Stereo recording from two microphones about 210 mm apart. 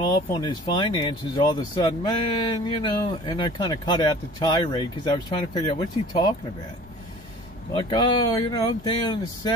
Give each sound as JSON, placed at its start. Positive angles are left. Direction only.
{"t": 0.0, "sound": "speech", "side_deg": 20}
{"t": 7.7, "sound": "speech", "side_deg": 20}